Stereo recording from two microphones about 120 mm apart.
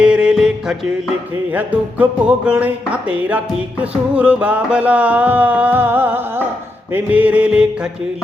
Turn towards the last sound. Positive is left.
turn(degrees=-5)  # may be behind; listen again after turning